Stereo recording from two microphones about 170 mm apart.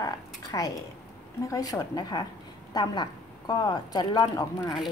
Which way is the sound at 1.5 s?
20° left (ahead or behind).